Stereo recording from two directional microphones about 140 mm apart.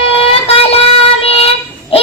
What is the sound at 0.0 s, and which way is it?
Child singing, 45° left (ahead or behind).